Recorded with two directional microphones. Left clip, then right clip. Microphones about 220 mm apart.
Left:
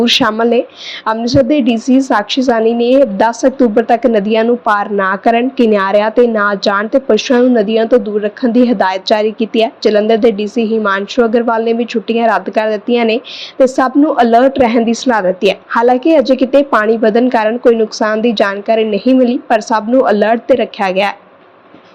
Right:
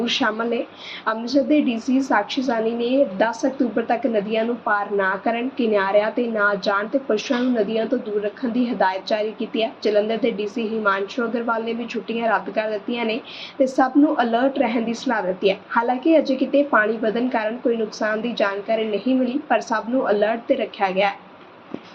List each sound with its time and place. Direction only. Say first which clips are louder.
0.0 s a woman's voice: left 11 dB; 45° left (ahead or behind)